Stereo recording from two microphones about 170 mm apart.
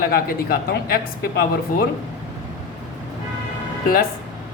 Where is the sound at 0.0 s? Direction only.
60° left (ahead or behind).